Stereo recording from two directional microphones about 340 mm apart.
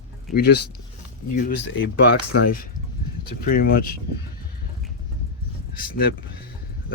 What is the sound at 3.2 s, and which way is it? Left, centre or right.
Speech, left.